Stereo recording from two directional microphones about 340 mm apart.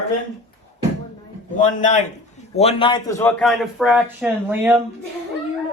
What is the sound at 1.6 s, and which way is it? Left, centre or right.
A man's voice, left.